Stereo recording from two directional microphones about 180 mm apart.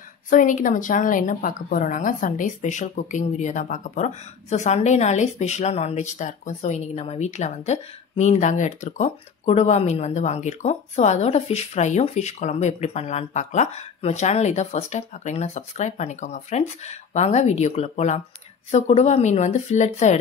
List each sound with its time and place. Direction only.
0.3 s a woman's voice: 45° left (ahead or behind)